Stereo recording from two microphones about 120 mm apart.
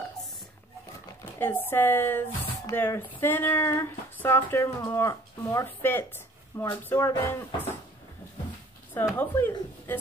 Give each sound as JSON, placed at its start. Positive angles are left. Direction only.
{"t": 1.4, "sound": "speech", "side_deg": 15}
{"t": 3.2, "sound": "female singing", "side_deg": 15}
{"t": 4.8, "sound": "speech", "side_deg": 20}
{"t": 8.9, "sound": "speech", "side_deg": 15}